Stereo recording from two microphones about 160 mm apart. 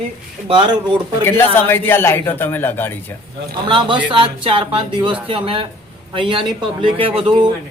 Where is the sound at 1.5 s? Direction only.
15° left (ahead or behind).